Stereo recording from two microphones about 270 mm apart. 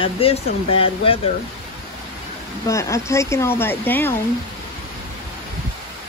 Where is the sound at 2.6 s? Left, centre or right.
Centre.